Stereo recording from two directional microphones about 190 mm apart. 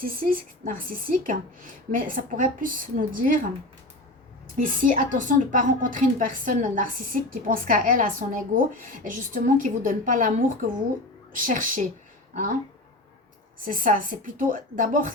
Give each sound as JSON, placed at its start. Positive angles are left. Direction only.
{"t": 0.0, "sound": "a woman's voice", "side_deg": -50}
{"t": 4.5, "sound": "a woman's voice", "side_deg": -45}
{"t": 13.7, "sound": "a woman's voice", "side_deg": -45}